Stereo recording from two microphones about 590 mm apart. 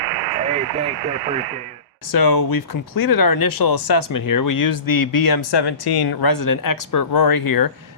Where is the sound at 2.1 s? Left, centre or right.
Left.